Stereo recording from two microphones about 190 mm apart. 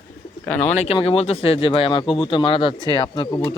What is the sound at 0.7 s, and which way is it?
Speech, 35° left (ahead or behind).